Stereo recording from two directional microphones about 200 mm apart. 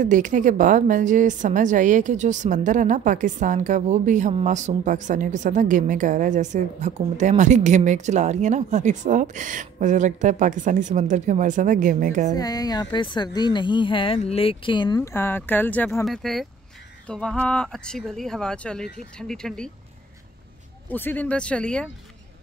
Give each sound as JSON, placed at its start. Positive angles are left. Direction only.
{"t": 0.0, "sound": "a woman's voice", "side_deg": -40}
{"t": 12.4, "sound": "speech", "side_deg": 20}
{"t": 20.9, "sound": "speech", "side_deg": 10}